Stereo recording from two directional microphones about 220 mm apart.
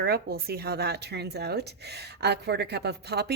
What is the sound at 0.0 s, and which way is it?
A woman's voice, 45° right (ahead or behind).